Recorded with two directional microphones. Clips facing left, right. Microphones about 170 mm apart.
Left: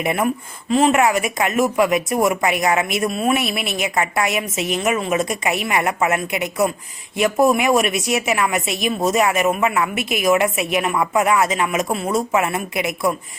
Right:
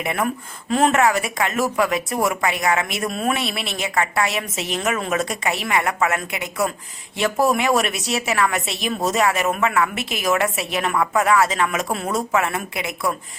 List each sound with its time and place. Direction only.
0.0 s speech: 20° left (ahead or behind)
0.7 s speech: centre (ahead or behind)
0.9 s speech: 15° left (ahead or behind)
3.1 s speech: 5° left (ahead or behind)
3.7 s speech: 15° left (ahead or behind)
9.9 s a woman's voice: 30° right (ahead or behind)
10.2 s speech: 15° left (ahead or behind)
12.4 s speech: 20° left (ahead or behind)